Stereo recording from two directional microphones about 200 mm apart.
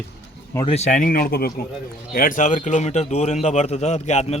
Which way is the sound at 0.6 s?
35° left (ahead or behind).